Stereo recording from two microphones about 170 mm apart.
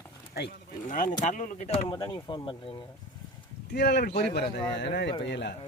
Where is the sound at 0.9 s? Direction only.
50° left (ahead or behind).